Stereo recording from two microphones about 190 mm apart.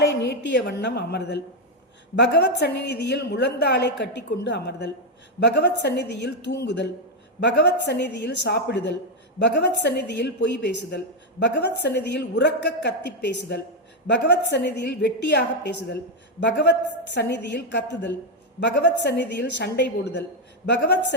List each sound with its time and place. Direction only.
0.2 s a woman's voice: 65° left (ahead or behind)